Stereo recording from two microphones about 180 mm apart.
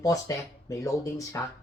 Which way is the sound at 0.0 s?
20° left (ahead or behind).